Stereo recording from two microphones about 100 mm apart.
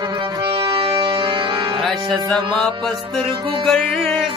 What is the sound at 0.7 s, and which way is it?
Accordion, 60° right (ahead or behind).